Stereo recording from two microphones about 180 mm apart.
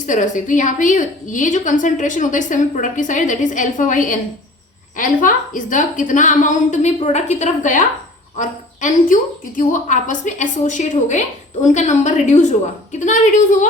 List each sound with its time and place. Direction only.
0.0 s a woman's voice: 45° left (ahead or behind)